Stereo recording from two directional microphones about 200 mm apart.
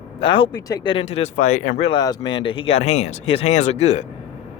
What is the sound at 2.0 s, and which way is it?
Speech, 20° left (ahead or behind).